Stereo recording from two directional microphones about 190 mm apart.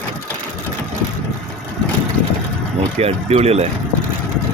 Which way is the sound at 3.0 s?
35° right (ahead or behind).